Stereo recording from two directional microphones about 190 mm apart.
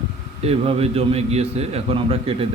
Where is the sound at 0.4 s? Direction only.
35° right (ahead or behind).